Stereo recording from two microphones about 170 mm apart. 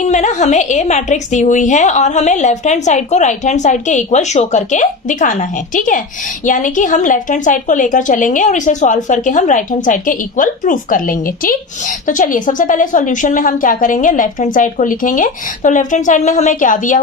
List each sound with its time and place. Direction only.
0.0 s a woman's voice: 45° left (ahead or behind)